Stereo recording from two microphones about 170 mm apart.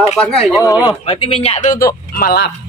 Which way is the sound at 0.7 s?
20° left (ahead or behind).